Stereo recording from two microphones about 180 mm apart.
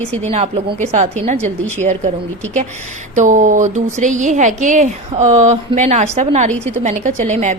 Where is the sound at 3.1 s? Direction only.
45° right (ahead or behind).